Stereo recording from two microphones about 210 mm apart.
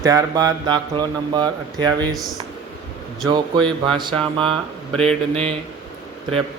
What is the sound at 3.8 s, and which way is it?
Speech, 25° right (ahead or behind).